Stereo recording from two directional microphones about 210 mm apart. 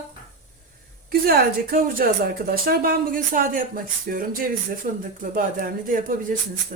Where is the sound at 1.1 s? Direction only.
45° right (ahead or behind).